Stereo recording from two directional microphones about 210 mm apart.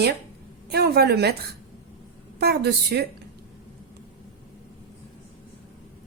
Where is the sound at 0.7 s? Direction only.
50° right (ahead or behind).